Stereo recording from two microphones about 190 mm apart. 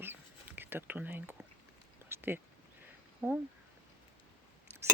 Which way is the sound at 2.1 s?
10° right (ahead or behind).